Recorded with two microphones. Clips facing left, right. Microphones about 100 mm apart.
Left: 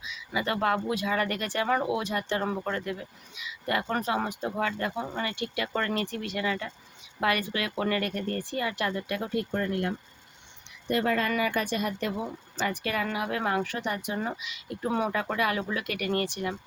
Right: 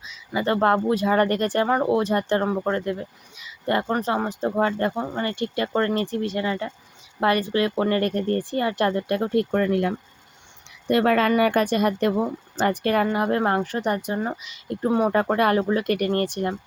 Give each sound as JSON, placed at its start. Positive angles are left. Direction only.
{"t": 0.0, "sound": "speech", "side_deg": -35}
{"t": 10.8, "sound": "speech", "side_deg": -70}